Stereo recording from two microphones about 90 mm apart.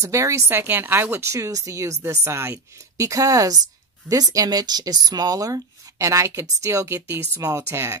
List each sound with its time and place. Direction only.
0.0 s speech: 35° right (ahead or behind)